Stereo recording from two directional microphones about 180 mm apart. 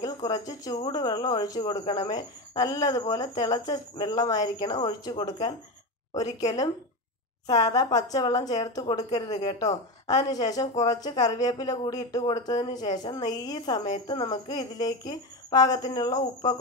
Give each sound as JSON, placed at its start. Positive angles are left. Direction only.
{"t": 0.0, "sound": "a woman's voice", "side_deg": 20}
{"t": 7.4, "sound": "a woman's voice", "side_deg": 20}
{"t": 9.3, "sound": "speech", "side_deg": 40}
{"t": 10.0, "sound": "a woman's voice", "side_deg": 20}